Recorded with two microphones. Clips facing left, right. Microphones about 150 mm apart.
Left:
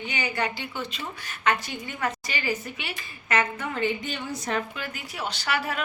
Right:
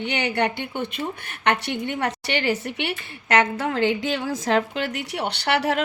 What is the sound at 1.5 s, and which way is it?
A woman's voice, 70° right (ahead or behind).